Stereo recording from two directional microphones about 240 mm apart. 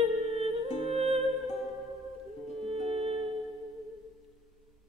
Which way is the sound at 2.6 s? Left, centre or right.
Right.